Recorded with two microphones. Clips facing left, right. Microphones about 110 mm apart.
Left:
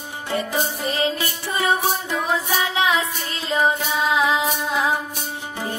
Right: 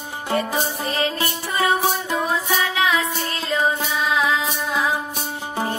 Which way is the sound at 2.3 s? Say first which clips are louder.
Even; 30° left (ahead or behind).